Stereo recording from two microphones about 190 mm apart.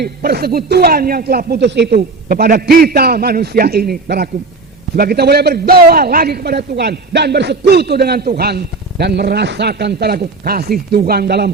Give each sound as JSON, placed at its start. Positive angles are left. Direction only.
{"t": 0.0, "sound": "a man's voice", "side_deg": -55}